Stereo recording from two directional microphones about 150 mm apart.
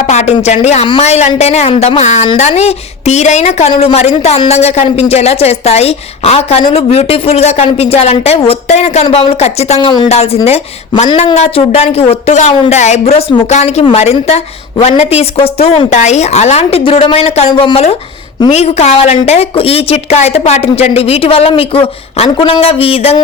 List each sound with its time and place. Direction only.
0.1 s a woman's voice: 50° left (ahead or behind)